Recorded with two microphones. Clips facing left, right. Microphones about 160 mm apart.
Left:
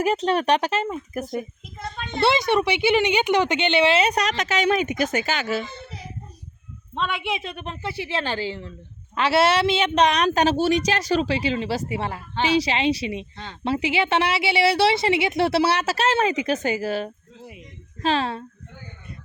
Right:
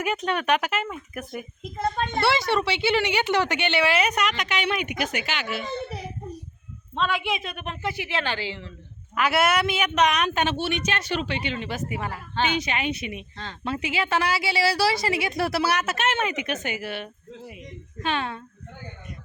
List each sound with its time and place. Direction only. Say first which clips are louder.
0.0 s a woman's voice: left 5 dB; 35° left (ahead or behind)
1.8 s a child's voice: right 5 dB; 50° right (ahead or behind)
2.2 s a woman's voice: left 5 dB; 20° left (ahead or behind); by 5.6 s 45° left (ahead or behind)
6.9 s a woman's voice: right 1 dB; 20° left (ahead or behind); by 8.7 s 40° left (ahead or behind)
9.1 s a woman's voice: left 3 dB; 30° left (ahead or behind)
13.3 s speech: even; 15° left (ahead or behind)
13.7 s a woman's voice: left 5 dB; 30° left (ahead or behind)